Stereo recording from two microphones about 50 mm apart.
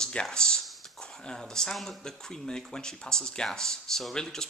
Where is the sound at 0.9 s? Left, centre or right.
Centre.